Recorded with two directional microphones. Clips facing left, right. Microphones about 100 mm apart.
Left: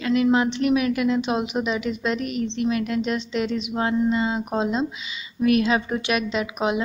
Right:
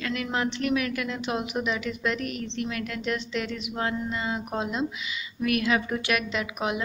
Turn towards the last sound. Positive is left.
turn(degrees=20)  # may be behind; listen again after turning